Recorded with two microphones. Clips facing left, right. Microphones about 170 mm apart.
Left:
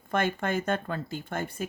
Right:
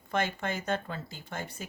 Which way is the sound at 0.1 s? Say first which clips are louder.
Left 4 dB; 55° left (ahead or behind).